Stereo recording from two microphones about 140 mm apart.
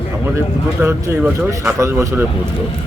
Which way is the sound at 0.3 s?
20° right (ahead or behind).